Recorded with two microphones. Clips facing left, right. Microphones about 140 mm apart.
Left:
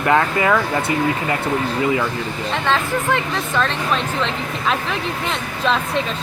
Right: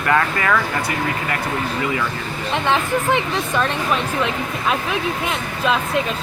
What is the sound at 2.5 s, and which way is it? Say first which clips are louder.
Speech: right 1 dB; 15° right (ahead or behind).